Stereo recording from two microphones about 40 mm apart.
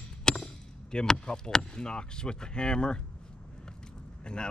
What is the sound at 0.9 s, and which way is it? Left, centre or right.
Speech, centre.